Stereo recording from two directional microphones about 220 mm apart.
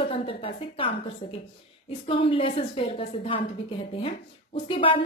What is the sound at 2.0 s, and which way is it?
Speech, 25° left (ahead or behind).